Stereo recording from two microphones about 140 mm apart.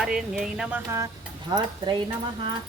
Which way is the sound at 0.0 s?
5° right (ahead or behind).